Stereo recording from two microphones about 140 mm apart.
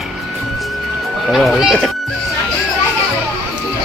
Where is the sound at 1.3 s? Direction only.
Centre (ahead or behind).